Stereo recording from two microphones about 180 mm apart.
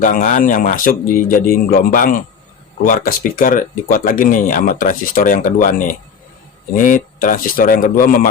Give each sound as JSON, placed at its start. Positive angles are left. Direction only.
{"t": 0.0, "sound": "speech", "side_deg": 45}